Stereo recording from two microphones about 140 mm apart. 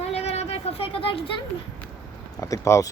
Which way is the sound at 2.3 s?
25° left (ahead or behind).